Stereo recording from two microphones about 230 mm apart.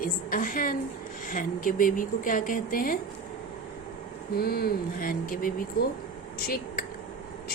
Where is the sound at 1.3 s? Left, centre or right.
Left.